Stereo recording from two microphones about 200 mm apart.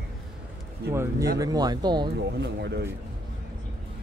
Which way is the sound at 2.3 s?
60° right (ahead or behind).